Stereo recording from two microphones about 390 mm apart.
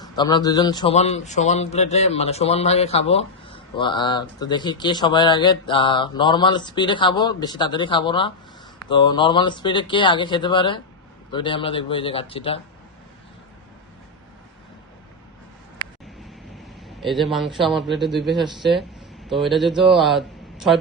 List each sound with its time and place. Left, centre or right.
0.0 s a man's voice: centre
16.6 s a man's voice: centre